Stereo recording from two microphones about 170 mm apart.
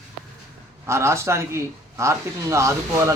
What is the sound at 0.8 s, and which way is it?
A man's voice, 15° right (ahead or behind).